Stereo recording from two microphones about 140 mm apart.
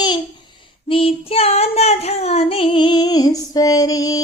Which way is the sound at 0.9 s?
40° left (ahead or behind).